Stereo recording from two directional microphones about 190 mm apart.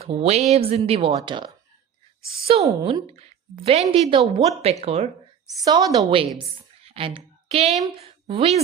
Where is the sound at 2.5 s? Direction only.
30° right (ahead or behind).